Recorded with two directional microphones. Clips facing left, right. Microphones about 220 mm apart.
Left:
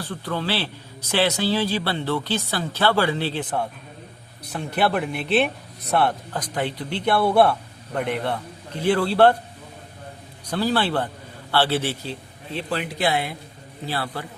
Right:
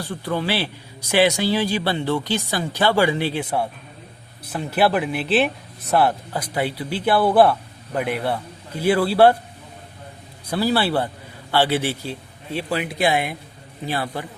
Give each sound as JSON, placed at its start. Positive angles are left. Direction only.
{"t": 0.0, "sound": "a man's voice", "side_deg": -15}
{"t": 10.4, "sound": "a man's voice", "side_deg": -10}